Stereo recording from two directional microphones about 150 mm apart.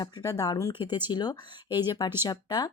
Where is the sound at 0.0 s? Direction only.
20° left (ahead or behind).